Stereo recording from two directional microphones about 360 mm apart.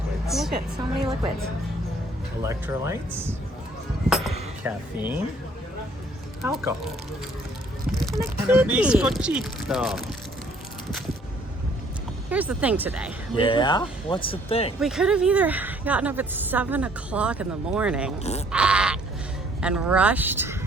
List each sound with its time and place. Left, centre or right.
0.3 s a woman's voice: centre
2.4 s speech: centre
6.4 s a woman's voice: centre
7.9 s a woman's voice: centre
12.3 s a woman's voice: centre
13.3 s speech: centre
14.8 s a woman's voice: centre
18.2 s speech: centre
18.5 s a sound: centre
19.6 s a woman's voice: centre